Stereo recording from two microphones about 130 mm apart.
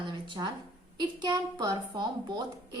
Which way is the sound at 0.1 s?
35° right (ahead or behind).